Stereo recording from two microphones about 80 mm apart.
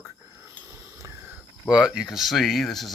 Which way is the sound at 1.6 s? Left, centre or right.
Centre.